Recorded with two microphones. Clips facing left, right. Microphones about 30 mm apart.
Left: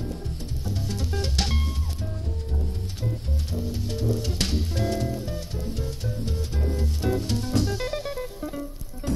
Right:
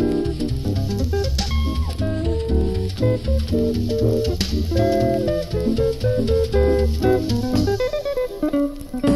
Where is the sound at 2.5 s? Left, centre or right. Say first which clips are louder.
Right 12 dB; right.